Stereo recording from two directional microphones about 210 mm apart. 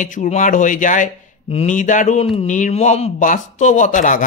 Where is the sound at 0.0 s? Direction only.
35° left (ahead or behind).